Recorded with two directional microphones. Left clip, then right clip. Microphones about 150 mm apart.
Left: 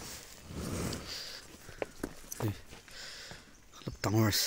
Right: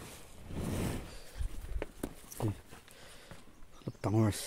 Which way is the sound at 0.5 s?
35° right (ahead or behind).